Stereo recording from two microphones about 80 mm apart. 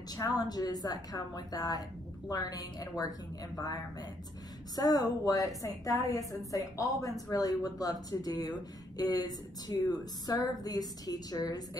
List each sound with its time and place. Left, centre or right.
0.1 s speech: left
4.7 s speech: left